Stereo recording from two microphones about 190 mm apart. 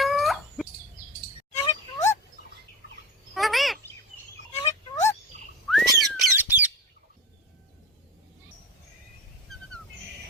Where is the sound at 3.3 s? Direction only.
Centre (ahead or behind).